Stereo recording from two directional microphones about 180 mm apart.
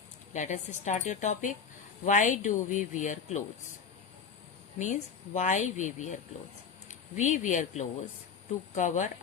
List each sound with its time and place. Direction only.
0.3 s a woman's voice: 40° left (ahead or behind)
4.8 s a woman's voice: 40° left (ahead or behind)